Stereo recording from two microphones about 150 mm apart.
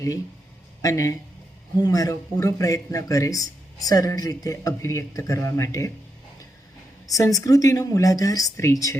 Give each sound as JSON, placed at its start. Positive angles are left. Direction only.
{"t": 0.8, "sound": "speech", "side_deg": 20}
{"t": 7.1, "sound": "speech", "side_deg": 20}